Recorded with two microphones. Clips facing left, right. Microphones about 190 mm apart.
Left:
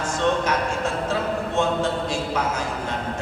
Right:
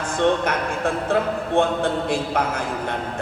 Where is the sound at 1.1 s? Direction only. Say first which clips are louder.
Right 6 dB; 55° right (ahead or behind).